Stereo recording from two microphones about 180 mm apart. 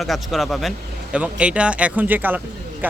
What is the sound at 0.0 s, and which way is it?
Speech, centre (ahead or behind).